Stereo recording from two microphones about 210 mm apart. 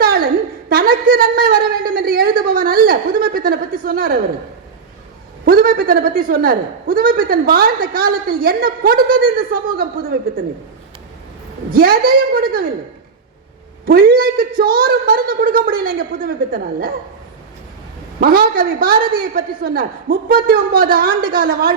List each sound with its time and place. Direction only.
0.0 s a sound: 45° right (ahead or behind)
5.5 s a woman's voice: 45° right (ahead or behind)
11.7 s a woman's voice: 45° right (ahead or behind)
13.8 s a woman's voice: 45° right (ahead or behind)
18.2 s a woman's voice: 45° right (ahead or behind)